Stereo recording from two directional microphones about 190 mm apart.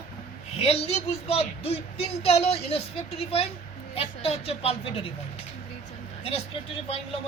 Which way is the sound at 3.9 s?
30° left (ahead or behind).